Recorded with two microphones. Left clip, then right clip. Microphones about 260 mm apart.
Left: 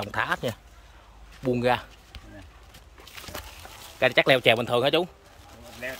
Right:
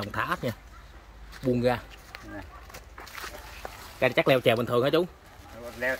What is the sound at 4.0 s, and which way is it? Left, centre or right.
Speech, centre.